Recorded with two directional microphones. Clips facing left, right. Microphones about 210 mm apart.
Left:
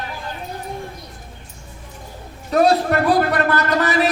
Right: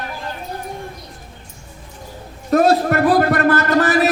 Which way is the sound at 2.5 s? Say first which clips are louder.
Right 2 dB; 50° right (ahead or behind).